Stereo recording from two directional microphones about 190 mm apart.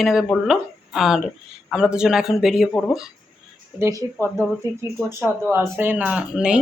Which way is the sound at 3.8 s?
15° right (ahead or behind).